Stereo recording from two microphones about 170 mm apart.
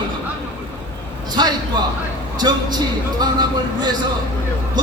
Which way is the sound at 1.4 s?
25° right (ahead or behind).